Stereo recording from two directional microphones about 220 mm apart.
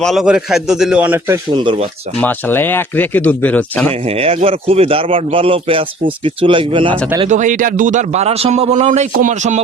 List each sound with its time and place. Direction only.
0.0 s a man's voice: centre (ahead or behind)
1.5 s a man's voice: 20° right (ahead or behind)
2.2 s speech: 10° left (ahead or behind)
4.0 s a man's voice: 25° right (ahead or behind)
7.3 s a man's voice: 35° right (ahead or behind)